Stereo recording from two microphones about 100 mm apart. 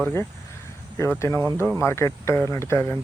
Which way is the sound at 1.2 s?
25° left (ahead or behind).